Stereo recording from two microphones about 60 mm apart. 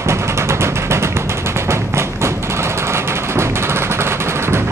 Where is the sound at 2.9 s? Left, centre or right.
Right.